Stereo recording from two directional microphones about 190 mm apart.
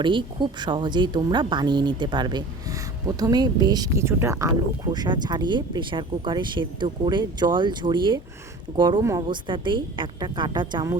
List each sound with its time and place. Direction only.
0.0 s speech: 25° right (ahead or behind)